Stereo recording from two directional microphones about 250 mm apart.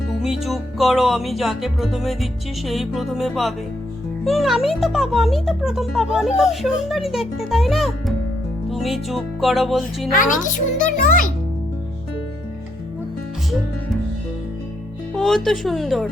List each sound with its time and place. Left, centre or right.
0.2 s music: centre
10.1 s a child's voice: left
15.1 s music: centre